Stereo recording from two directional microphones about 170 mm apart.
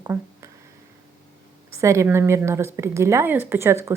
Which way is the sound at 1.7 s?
15° right (ahead or behind).